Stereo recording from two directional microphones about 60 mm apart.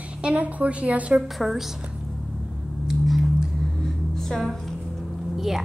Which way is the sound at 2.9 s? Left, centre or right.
Centre.